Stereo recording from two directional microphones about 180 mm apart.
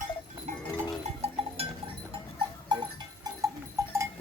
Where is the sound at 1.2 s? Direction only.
35° right (ahead or behind).